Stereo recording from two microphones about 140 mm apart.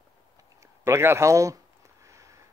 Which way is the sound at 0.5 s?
20° right (ahead or behind).